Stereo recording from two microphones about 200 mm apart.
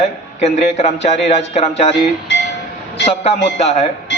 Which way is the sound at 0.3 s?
35° left (ahead or behind).